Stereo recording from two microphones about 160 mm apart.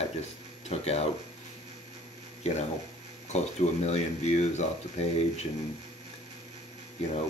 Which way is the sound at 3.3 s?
45° left (ahead or behind).